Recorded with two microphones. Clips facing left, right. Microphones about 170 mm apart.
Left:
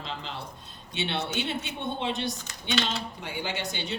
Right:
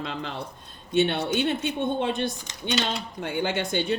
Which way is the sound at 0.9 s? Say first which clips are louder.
Right 8 dB; 50° right (ahead or behind).